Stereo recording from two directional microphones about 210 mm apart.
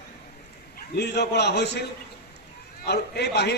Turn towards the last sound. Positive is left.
turn(degrees=50)  # may be behind; listen again after turning